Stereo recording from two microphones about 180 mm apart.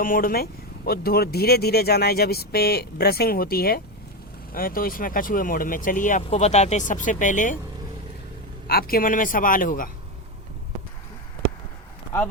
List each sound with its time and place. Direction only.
0.0 s speech: 50° left (ahead or behind)
8.6 s speech: 55° left (ahead or behind)